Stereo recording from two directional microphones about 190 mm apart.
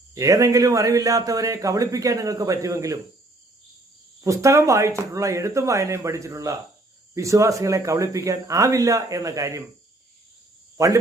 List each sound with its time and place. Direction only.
0.1 s a man's voice: 15° right (ahead or behind)
4.2 s a man's voice: 15° right (ahead or behind)
10.8 s a man's voice: 15° right (ahead or behind)